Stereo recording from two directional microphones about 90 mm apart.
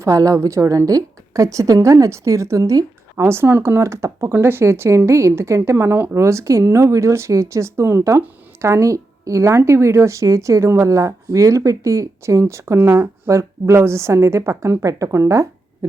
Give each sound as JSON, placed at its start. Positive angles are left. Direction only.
{"t": 0.0, "sound": "a woman's voice", "side_deg": -40}